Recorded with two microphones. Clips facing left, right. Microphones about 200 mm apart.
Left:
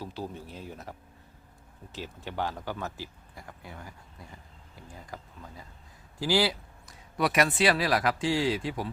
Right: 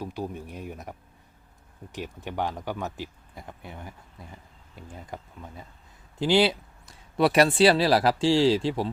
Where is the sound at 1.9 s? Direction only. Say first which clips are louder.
Right 3 dB; 15° right (ahead or behind).